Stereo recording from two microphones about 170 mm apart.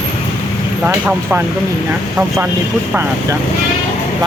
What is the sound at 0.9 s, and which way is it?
Speech, 10° right (ahead or behind).